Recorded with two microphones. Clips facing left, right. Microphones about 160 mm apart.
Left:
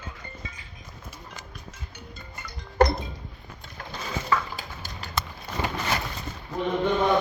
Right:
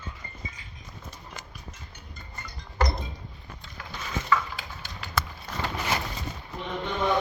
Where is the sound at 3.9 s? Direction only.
35° left (ahead or behind).